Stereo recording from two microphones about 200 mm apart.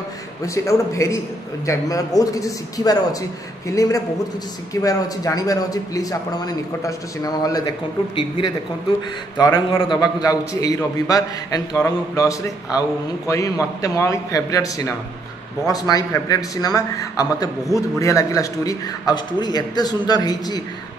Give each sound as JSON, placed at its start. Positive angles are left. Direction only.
{"t": 0.4, "sound": "a man's voice", "side_deg": 15}
{"t": 9.4, "sound": "a man's voice", "side_deg": 20}